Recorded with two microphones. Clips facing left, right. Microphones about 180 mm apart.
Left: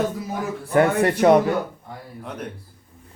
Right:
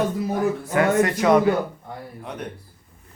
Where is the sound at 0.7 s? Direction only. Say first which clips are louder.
Left 3 dB; 35° left (ahead or behind).